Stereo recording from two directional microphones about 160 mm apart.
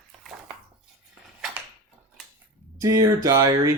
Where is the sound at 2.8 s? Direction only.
20° right (ahead or behind).